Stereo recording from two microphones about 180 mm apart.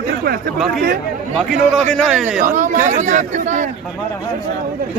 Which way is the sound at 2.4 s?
45° right (ahead or behind).